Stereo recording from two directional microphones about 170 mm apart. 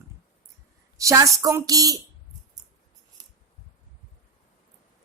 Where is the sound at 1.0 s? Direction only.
20° right (ahead or behind).